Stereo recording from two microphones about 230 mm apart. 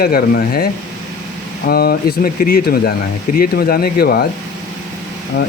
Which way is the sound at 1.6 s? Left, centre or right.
Left.